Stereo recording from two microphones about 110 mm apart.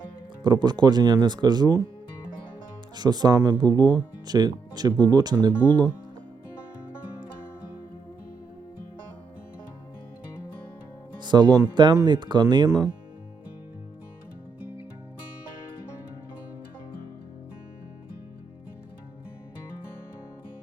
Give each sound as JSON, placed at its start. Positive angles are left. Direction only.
{"t": 0.4, "sound": "speech", "side_deg": -40}
{"t": 2.9, "sound": "speech", "side_deg": -40}
{"t": 11.2, "sound": "music", "side_deg": -40}
{"t": 11.7, "sound": "speech", "side_deg": -45}